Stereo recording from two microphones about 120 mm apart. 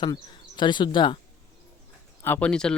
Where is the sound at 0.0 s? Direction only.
40° left (ahead or behind).